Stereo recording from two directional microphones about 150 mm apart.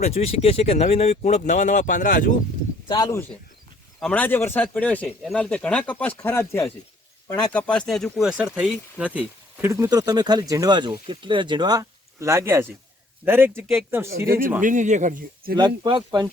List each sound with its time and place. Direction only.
0.0 s speech: 45° left (ahead or behind); by 2.3 s 65° left (ahead or behind)
2.8 s speech: 30° left (ahead or behind)
4.0 s speech: 10° left (ahead or behind)
7.3 s a man's voice: 5° left (ahead or behind); by 13.7 s 15° right (ahead or behind)
14.6 s speech: 55° right (ahead or behind)
15.5 s speech: 30° right (ahead or behind)